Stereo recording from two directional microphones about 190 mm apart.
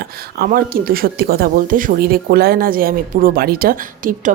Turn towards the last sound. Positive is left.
turn(degrees=-45)  # may be behind; listen again after turning